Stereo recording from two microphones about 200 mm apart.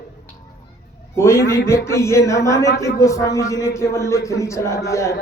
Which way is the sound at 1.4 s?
50° left (ahead or behind).